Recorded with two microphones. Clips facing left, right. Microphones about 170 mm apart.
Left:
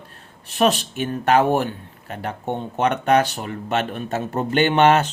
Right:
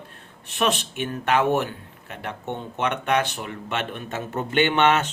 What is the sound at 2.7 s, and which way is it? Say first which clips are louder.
A man's voice: left 5 dB; 40° left (ahead or behind).